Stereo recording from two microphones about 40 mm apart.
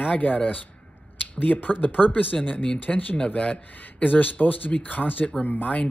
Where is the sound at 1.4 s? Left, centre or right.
Left.